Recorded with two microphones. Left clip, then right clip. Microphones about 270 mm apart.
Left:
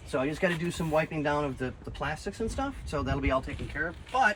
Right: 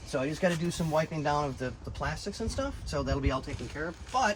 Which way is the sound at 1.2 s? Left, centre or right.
Centre.